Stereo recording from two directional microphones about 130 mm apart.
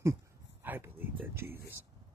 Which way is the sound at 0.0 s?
20° right (ahead or behind).